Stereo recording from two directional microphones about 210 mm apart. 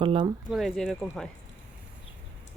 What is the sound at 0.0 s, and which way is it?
Speech, 25° right (ahead or behind).